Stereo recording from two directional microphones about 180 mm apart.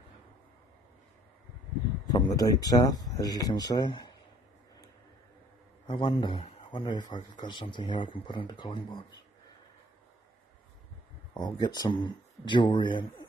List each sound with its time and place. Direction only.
2.0 s a man's voice: 20° left (ahead or behind)
5.9 s a man's voice: 25° left (ahead or behind)
11.3 s a man's voice: 25° left (ahead or behind)